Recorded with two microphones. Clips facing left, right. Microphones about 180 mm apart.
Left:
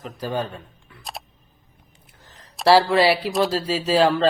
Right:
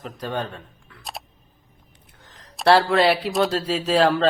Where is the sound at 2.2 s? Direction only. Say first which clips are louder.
Even; centre (ahead or behind).